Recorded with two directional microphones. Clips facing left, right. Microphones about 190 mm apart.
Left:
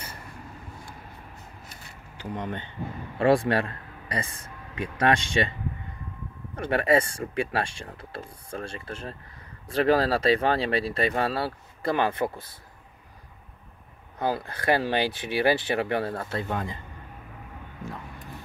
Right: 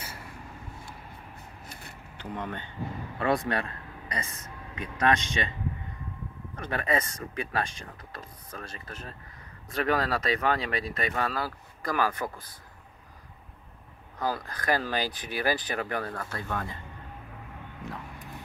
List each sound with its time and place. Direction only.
2.1 s speech: 15° left (ahead or behind)
3.2 s speech: 30° left (ahead or behind)
6.5 s speech: 30° left (ahead or behind)
14.1 s speech: 25° left (ahead or behind)